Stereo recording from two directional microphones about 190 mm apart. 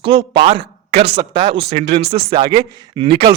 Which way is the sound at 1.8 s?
60° right (ahead or behind).